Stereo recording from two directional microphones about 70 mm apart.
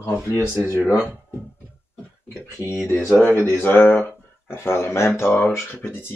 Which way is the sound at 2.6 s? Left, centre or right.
Left.